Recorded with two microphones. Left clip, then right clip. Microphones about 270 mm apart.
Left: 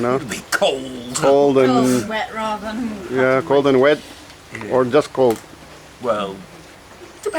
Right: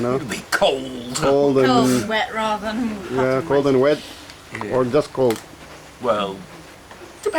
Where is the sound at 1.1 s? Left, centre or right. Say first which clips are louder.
Left 3 dB; centre.